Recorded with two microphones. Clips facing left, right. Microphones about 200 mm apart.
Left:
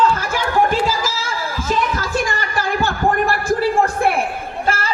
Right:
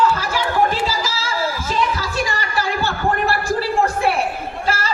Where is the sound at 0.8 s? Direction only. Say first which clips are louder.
Left 2 dB; 50° left (ahead or behind).